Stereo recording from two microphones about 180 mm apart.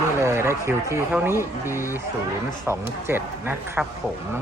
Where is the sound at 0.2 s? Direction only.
15° right (ahead or behind).